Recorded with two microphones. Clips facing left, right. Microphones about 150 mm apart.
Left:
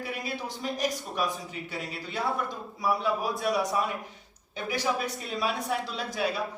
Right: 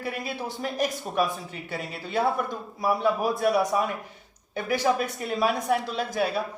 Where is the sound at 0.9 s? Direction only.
Centre (ahead or behind).